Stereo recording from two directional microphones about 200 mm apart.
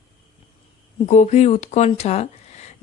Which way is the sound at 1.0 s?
35° left (ahead or behind).